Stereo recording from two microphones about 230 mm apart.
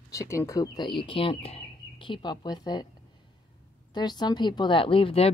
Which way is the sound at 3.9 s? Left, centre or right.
Centre.